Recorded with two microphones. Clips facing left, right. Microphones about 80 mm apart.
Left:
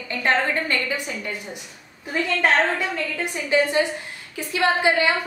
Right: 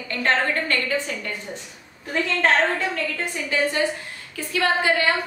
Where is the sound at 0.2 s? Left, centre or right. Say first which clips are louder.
Even; centre.